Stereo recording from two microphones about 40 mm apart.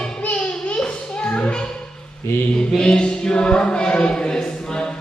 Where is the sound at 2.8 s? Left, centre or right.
Left.